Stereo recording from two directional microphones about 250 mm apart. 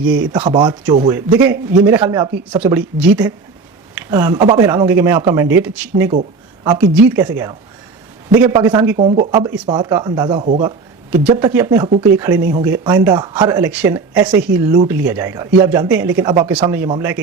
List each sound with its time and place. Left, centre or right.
0.3 s speech: centre
11.3 s speech: centre